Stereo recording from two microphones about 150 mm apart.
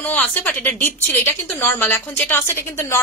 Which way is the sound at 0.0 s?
10° left (ahead or behind).